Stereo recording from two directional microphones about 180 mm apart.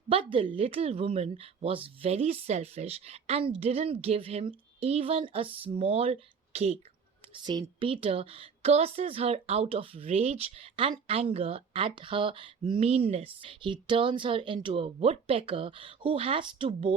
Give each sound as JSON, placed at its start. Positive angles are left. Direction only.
{"t": 0.1, "sound": "a woman's voice", "side_deg": -30}
{"t": 7.4, "sound": "a woman's voice", "side_deg": -25}